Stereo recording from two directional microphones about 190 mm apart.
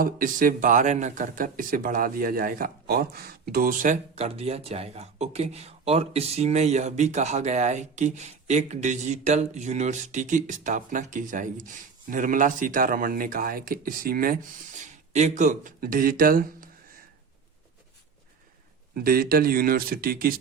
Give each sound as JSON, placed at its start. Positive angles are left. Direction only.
{"t": 0.0, "sound": "speech", "side_deg": -45}
{"t": 14.8, "sound": "speech", "side_deg": -40}
{"t": 18.9, "sound": "speech", "side_deg": -50}